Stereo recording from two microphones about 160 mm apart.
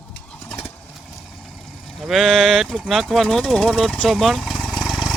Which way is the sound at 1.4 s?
Centre (ahead or behind).